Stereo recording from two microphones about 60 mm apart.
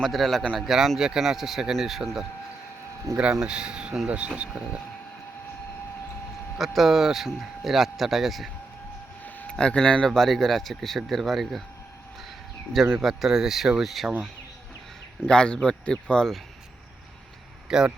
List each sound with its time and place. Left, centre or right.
0.0 s speech: centre
3.1 s speech: right
3.4 s speech: centre
6.6 s speech: centre
9.2 s a sound: left
9.6 s speech: centre
10.1 s speech: centre
12.9 s speech: centre
15.3 s speech: centre
17.7 s a man's voice: centre